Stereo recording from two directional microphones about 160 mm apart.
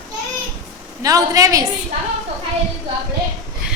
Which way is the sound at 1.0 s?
20° right (ahead or behind).